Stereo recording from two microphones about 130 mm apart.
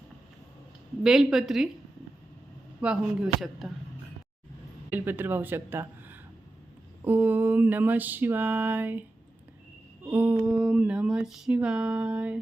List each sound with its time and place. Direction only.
1.0 s a woman's voice: 5° right (ahead or behind)
2.8 s music: 5° right (ahead or behind)
4.9 s a woman's voice: 15° right (ahead or behind)
7.0 s music: 15° right (ahead or behind)
10.1 s music: 15° right (ahead or behind)